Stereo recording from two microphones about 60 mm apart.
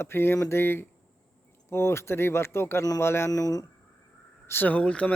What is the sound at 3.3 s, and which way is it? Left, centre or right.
Speech, left.